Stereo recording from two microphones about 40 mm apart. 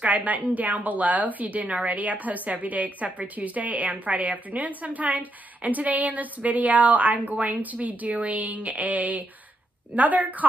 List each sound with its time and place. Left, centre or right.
0.0 s a woman's voice: right